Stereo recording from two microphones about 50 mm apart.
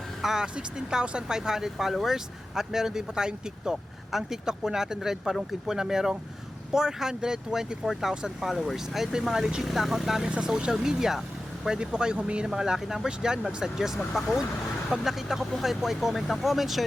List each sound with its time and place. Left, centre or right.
0.2 s speech: centre
10.2 s speech: centre